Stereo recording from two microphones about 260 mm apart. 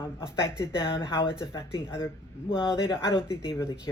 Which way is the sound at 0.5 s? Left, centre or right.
Centre.